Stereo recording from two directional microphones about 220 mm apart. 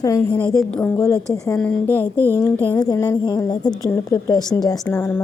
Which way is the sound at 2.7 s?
20° left (ahead or behind).